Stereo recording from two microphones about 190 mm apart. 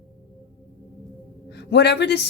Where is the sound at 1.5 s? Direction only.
60° left (ahead or behind).